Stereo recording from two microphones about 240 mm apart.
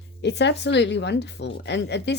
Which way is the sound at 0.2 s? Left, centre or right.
Left.